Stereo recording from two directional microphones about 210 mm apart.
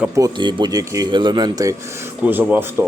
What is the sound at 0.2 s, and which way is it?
A man's voice, 20° right (ahead or behind).